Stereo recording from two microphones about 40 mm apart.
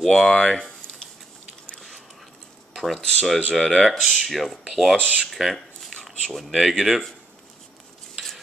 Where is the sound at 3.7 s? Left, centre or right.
Centre.